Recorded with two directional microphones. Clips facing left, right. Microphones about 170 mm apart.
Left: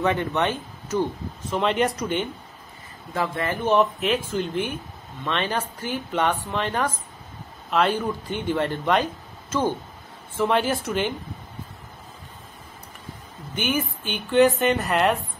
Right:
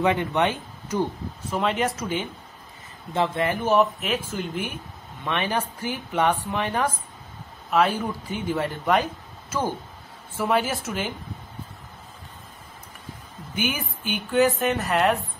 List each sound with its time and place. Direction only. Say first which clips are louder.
0.0 s a woman's voice: right 1 dB; 15° right (ahead or behind)
3.2 s speech: right 2 dB; 20° right (ahead or behind)
3.6 s speech: left 2 dB; 5° right (ahead or behind)
13.6 s a woman's voice: left 3 dB; 10° right (ahead or behind)